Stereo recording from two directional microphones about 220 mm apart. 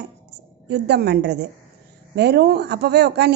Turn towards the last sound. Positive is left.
turn(degrees=-50)  # may be behind; listen again after turning